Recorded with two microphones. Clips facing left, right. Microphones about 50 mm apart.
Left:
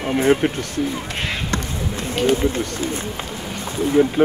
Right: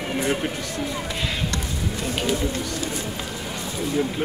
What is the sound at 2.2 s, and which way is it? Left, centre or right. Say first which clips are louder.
Speech: left 8 dB; left.